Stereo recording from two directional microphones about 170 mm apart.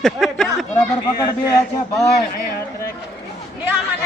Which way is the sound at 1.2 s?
20° left (ahead or behind).